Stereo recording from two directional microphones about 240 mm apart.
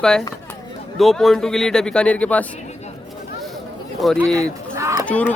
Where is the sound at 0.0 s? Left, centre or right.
Centre.